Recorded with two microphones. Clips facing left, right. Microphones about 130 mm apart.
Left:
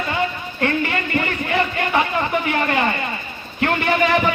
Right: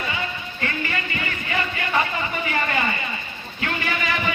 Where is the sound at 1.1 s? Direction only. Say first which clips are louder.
Left 7 dB; 50° left (ahead or behind).